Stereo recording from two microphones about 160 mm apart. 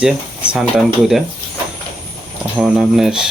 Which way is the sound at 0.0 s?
5° right (ahead or behind).